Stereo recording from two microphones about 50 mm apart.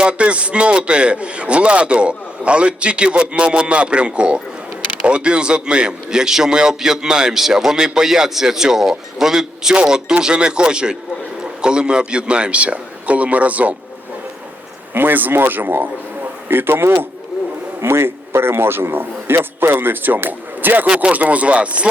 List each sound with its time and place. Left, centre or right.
0.0 s a man's voice: right
14.9 s a man's voice: right
20.8 s a man's voice: right